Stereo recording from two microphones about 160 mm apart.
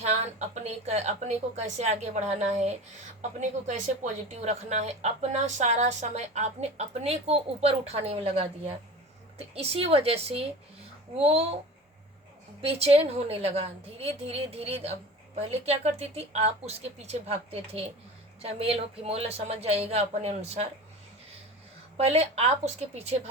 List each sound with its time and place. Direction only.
0.0 s a woman's voice: 45° right (ahead or behind)
4.3 s a woman's voice: 45° right (ahead or behind)
12.6 s speech: 40° right (ahead or behind)
21.9 s speech: 40° right (ahead or behind)